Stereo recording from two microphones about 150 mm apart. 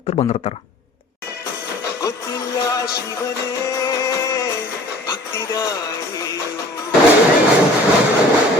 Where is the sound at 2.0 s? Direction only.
25° left (ahead or behind).